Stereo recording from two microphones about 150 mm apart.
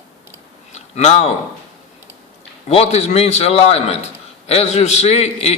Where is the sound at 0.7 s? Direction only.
45° left (ahead or behind).